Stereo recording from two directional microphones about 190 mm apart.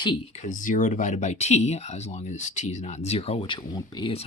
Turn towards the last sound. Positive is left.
turn(degrees=25)  # may be behind; listen again after turning